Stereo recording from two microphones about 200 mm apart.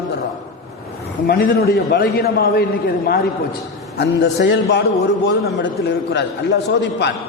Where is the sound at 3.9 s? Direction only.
60° left (ahead or behind).